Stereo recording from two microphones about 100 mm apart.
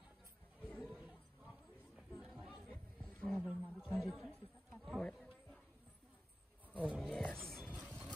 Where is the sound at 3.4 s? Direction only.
10° right (ahead or behind).